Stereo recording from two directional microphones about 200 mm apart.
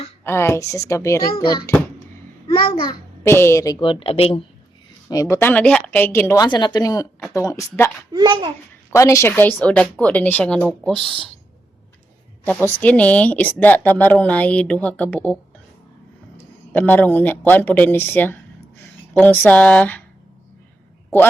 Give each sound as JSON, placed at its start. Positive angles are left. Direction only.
{"t": 0.3, "sound": "a woman's voice", "side_deg": 15}
{"t": 2.8, "sound": "a child's voice", "side_deg": 15}
{"t": 5.0, "sound": "a woman's voice", "side_deg": 15}
{"t": 8.1, "sound": "speech", "side_deg": -20}
{"t": 8.9, "sound": "a woman's voice", "side_deg": 15}
{"t": 12.5, "sound": "a woman's voice", "side_deg": 5}
{"t": 16.7, "sound": "a woman's voice", "side_deg": 10}